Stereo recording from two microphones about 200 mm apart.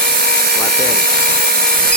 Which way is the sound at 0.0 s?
50° right (ahead or behind).